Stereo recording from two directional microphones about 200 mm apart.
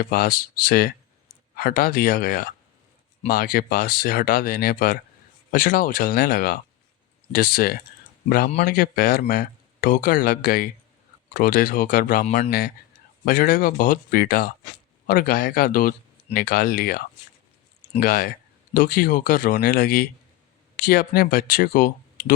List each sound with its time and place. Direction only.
0.0 s speech: 45° left (ahead or behind)
12.5 s speech: 50° left (ahead or behind)
18.0 s speech: 45° left (ahead or behind)